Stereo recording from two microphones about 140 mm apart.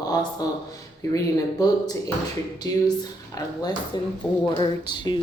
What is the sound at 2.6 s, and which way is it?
Speech, 25° left (ahead or behind).